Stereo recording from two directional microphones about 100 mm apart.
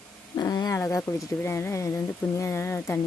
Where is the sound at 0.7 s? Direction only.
30° left (ahead or behind).